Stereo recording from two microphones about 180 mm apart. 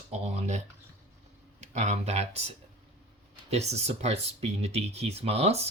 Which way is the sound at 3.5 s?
35° right (ahead or behind).